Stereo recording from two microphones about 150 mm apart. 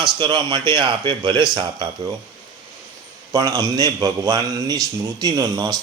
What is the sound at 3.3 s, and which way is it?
Speech, 25° right (ahead or behind).